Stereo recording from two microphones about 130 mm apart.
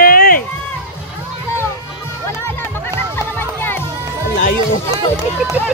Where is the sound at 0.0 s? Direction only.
90° left.